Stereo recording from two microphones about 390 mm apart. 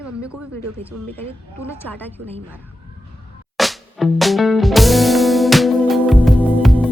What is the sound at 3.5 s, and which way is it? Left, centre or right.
Music, centre.